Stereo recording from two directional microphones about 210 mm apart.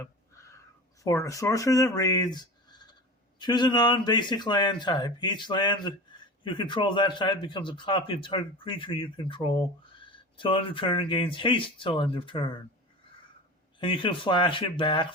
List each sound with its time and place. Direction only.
0.0 s a sound: 15° left (ahead or behind)
1.0 s a man's voice: 15° left (ahead or behind)
13.7 s a man's voice: 25° left (ahead or behind)